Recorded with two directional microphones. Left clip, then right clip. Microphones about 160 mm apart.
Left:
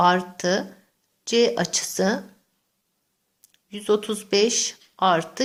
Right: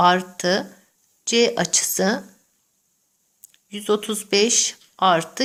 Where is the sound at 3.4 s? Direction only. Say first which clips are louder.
Right 3 dB; 20° right (ahead or behind).